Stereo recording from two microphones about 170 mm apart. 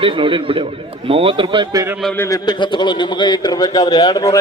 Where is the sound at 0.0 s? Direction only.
30° right (ahead or behind).